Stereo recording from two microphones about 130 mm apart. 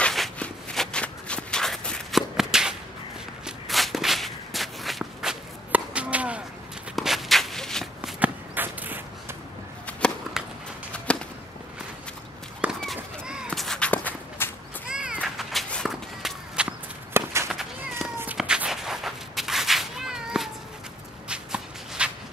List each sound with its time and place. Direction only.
0.0 s shuffle: 5° left (ahead or behind)
3.4 s walk: centre (ahead or behind)
8.2 s a sound: 15° right (ahead or behind)
11.1 s a sound: 10° left (ahead or behind)
12.6 s a sound: 5° right (ahead or behind)
13.5 s walk: 5° left (ahead or behind)
14.9 s cat: 5° right (ahead or behind)
15.7 s walk: centre (ahead or behind)
17.1 s walk: 20° right (ahead or behind)
17.9 s cat: 15° right (ahead or behind)
18.4 s a sound: 5° right (ahead or behind)
21.3 s shuffle: 5° right (ahead or behind)